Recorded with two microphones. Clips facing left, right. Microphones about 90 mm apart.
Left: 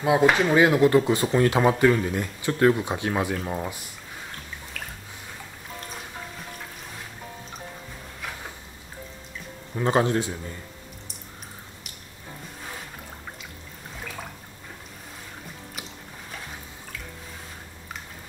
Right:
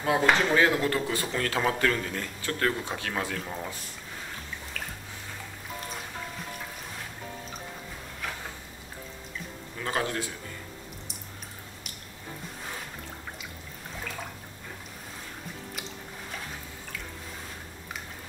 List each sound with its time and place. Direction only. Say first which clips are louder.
0.0 s speech: left 4 dB; 15° left (ahead or behind)
4.7 s a sound: even; centre (ahead or behind)
9.8 s speech: left 8 dB; 25° left (ahead or behind)